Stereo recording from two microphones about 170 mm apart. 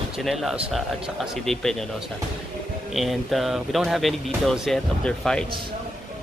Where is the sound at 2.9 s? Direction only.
Centre (ahead or behind).